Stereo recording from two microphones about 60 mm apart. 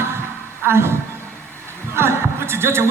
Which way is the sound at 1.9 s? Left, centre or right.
Right.